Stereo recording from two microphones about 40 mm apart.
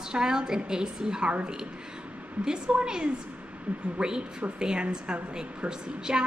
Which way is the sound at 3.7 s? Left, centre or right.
Right.